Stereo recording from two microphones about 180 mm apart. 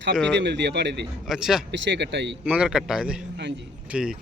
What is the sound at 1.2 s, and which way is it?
Speech, 5° right (ahead or behind).